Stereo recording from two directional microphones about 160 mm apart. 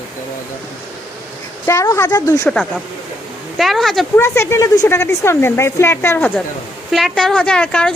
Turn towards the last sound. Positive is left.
turn(degrees=5)  # may be behind; listen again after turning